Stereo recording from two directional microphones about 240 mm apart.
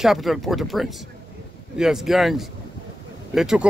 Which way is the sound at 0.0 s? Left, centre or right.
Centre.